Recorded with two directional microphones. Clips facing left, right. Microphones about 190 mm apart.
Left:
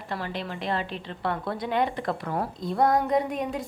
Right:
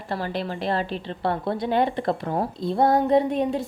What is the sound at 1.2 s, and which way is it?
A woman's voice, 30° right (ahead or behind).